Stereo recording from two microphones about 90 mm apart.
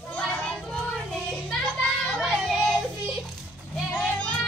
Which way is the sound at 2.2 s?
Centre (ahead or behind).